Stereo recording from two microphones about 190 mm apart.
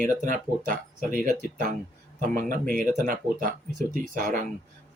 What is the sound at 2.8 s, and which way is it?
Speech, 45° right (ahead or behind).